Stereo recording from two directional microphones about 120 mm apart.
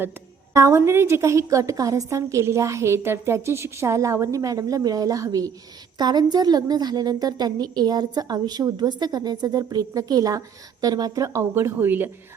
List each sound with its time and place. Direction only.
0.5 s a woman's voice: 20° right (ahead or behind)